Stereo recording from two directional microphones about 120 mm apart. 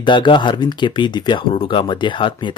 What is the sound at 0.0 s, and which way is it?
Speech, 40° left (ahead or behind).